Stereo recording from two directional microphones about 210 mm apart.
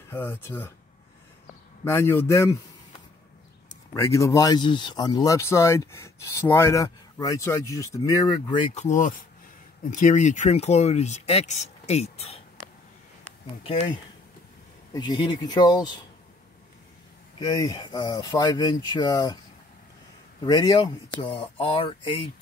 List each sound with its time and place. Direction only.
0.1 s speech: 10° left (ahead or behind)
1.9 s speech: 10° left (ahead or behind)
3.9 s speech: 15° left (ahead or behind)
8.7 s speech: 35° left (ahead or behind)
14.9 s speech: 20° left (ahead or behind)
17.4 s speech: 15° left (ahead or behind)
20.4 s speech: 20° left (ahead or behind)